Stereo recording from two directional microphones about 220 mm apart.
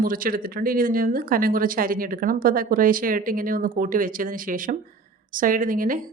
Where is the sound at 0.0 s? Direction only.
40° right (ahead or behind).